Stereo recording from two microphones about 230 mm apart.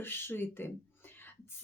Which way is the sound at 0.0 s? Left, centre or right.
Centre.